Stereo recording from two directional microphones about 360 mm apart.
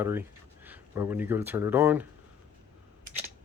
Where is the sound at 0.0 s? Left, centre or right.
Centre.